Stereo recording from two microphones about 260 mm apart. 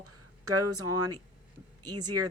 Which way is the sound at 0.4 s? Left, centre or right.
Right.